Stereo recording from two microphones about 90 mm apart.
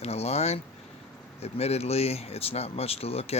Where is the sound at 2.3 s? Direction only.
90° left.